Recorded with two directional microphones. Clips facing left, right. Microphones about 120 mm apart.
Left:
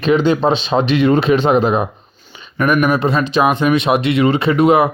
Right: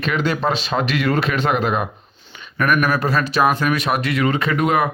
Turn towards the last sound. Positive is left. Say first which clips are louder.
# left 6 dB
turn(degrees=30)  # may be behind; listen again after turning